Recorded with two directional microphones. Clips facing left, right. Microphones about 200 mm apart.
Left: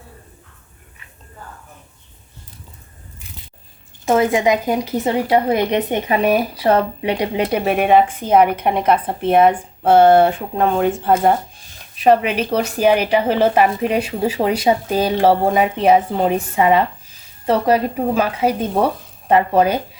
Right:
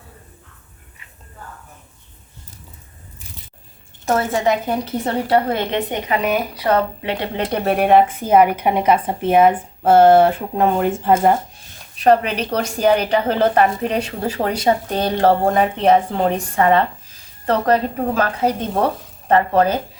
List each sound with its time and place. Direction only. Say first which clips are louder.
4.0 s speech: left 3 dB; 15° left (ahead or behind)
7.0 s speech: left 4 dB; 15° left (ahead or behind); by 11.3 s 5° right (ahead or behind)
11.9 s speech: left 1 dB; 5° left (ahead or behind)